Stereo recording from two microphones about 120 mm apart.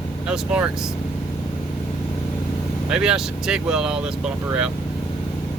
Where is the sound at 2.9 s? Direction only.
5° right (ahead or behind).